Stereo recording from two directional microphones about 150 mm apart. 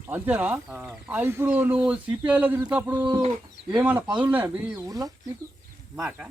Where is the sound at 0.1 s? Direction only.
10° right (ahead or behind).